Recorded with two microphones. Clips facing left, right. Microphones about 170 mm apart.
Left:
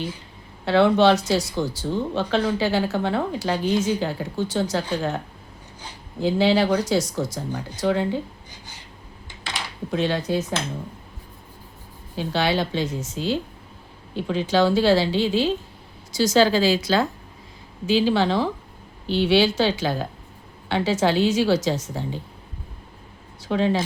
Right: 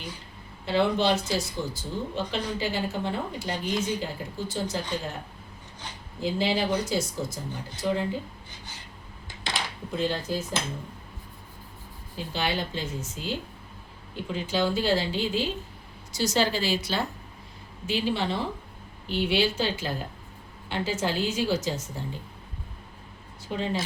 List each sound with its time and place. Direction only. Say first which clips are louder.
0.6 s a woman's voice: left 7 dB; 80° left
6.2 s speech: left 7 dB; 80° left
9.9 s speech: left 6 dB; 75° left (ahead or behind)
12.1 s a woman's voice: left 7 dB; 90° left
23.4 s speech: left 8 dB; 85° left